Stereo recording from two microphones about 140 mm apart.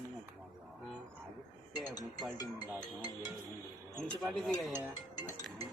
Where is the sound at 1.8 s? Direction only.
30° left (ahead or behind).